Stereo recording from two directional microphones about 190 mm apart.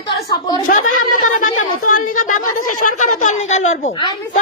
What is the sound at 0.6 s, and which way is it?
Speech, 45° left (ahead or behind).